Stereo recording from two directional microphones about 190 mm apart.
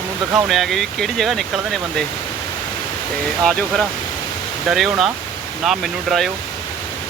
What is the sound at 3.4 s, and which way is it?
Speech, 5° left (ahead or behind).